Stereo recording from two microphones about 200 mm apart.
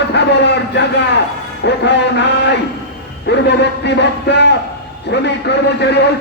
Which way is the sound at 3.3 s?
60° left (ahead or behind).